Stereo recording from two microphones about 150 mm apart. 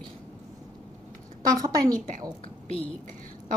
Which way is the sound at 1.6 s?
25° right (ahead or behind).